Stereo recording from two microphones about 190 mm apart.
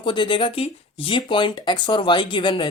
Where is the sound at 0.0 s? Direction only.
25° left (ahead or behind).